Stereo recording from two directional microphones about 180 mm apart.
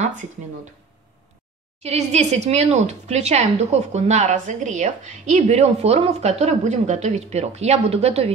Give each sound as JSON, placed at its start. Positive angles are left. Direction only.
{"t": 1.8, "sound": "speech", "side_deg": -35}